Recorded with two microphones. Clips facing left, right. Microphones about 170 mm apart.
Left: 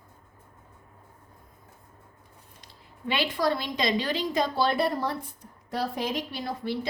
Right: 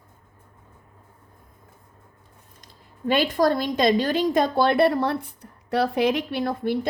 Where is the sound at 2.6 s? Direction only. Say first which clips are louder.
Right 7 dB; 45° right (ahead or behind).